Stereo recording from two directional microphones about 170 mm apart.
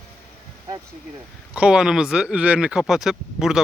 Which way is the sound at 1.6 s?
5° right (ahead or behind).